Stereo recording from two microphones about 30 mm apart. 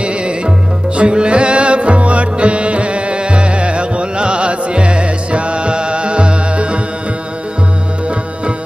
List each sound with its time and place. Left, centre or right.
0.0 s music: right